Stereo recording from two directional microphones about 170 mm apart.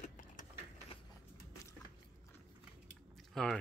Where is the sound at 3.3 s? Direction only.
Centre (ahead or behind).